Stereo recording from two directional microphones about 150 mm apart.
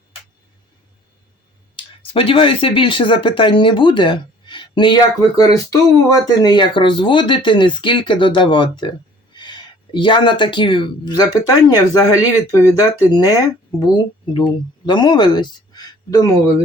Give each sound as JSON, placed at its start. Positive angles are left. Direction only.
{"t": 1.7, "sound": "speech", "side_deg": 35}